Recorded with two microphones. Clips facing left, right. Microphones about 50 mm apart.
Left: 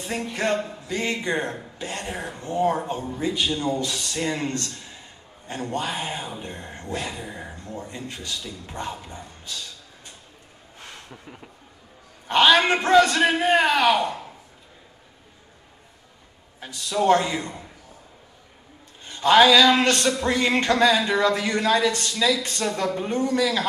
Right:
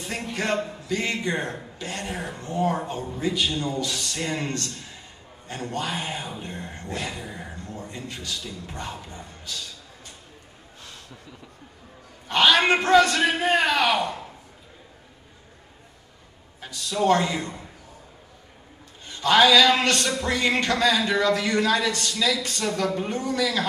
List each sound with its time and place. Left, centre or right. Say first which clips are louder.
0.0 s a man's voice: left 3 dB; left
3.7 s a man's voice: left 1 dB; left
5.5 s a man's voice: left 2 dB; left
7.1 s a sound: left 1 dB; centre
7.9 s a man's voice: left 1 dB; left
10.8 s a sound: left 3 dB; left
12.3 s a man's voice: left 2 dB; left
16.5 s a man's voice: left 2 dB; left
19.0 s a man's voice: left 2 dB; left